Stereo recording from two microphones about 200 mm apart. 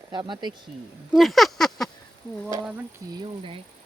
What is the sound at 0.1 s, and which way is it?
Speech, 20° right (ahead or behind).